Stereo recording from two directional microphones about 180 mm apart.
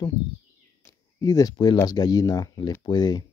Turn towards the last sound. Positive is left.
turn(degrees=20)  # may be behind; listen again after turning